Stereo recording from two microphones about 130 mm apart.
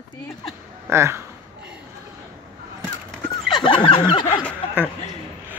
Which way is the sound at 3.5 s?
40° left (ahead or behind).